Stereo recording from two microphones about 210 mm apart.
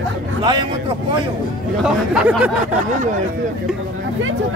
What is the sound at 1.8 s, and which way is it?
Speech, 5° right (ahead or behind).